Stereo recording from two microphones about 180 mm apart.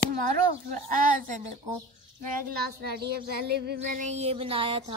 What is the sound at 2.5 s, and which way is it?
Child singing, 60° right (ahead or behind).